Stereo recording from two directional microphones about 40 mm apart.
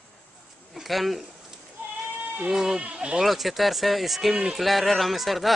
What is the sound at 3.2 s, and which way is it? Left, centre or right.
Speech, centre.